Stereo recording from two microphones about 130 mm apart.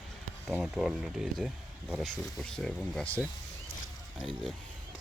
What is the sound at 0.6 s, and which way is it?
Speech, 5° right (ahead or behind).